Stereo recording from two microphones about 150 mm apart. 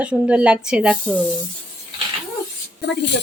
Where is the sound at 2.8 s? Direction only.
90° left.